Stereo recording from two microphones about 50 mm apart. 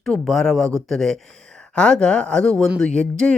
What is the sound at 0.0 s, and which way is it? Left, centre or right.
Speech, centre.